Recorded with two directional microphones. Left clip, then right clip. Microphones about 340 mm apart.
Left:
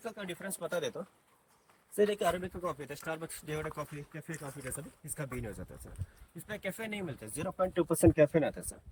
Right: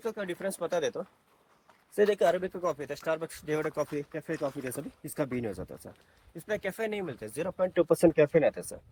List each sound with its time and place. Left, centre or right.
0.0 s speech: centre